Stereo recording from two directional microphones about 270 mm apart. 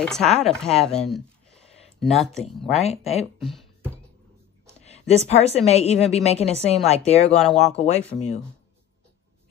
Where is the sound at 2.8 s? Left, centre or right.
Left.